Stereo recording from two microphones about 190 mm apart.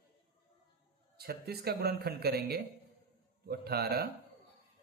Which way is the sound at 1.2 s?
55° right (ahead or behind).